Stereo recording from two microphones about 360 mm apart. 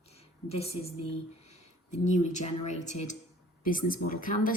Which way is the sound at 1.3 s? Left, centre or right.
Centre.